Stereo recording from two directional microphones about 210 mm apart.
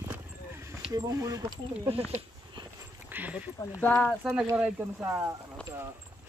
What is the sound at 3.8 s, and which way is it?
Speech, 5° left (ahead or behind).